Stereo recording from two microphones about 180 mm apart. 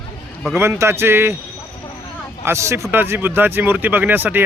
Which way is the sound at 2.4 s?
15° right (ahead or behind).